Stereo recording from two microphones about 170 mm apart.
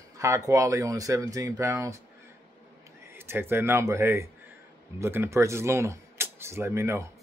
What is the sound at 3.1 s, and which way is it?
Speech, 15° right (ahead or behind).